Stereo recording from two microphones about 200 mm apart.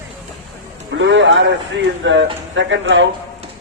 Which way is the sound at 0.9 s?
65° right (ahead or behind).